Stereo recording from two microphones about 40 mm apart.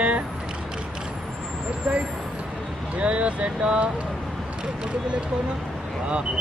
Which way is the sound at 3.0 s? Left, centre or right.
Right.